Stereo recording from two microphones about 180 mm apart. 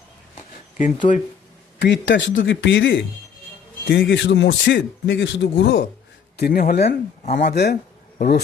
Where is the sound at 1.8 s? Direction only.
80° left.